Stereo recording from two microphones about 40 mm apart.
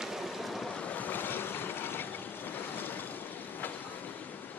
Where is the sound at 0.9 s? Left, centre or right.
Left.